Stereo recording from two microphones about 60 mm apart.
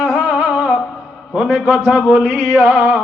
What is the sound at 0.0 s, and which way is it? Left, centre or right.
Music, right.